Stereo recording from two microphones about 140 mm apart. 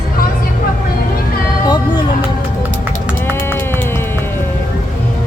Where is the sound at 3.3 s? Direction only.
15° left (ahead or behind).